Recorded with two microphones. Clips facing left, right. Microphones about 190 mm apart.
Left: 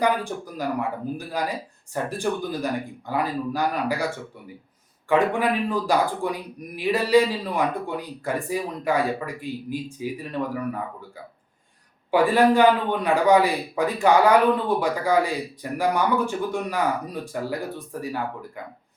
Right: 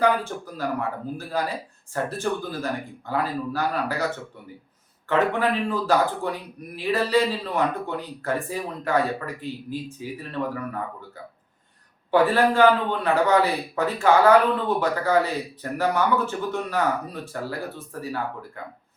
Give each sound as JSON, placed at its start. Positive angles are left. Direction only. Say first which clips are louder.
{"t": 0.0, "sound": "a man's voice", "louder": "right 1 dB", "side_deg": 15}
{"t": 12.1, "sound": "a man's voice", "louder": "left 1 dB", "side_deg": 15}